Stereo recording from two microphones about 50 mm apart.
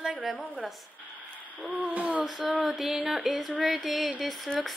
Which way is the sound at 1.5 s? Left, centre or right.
Right.